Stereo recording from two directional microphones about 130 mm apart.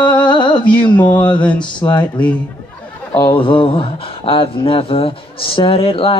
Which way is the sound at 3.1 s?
40° left (ahead or behind).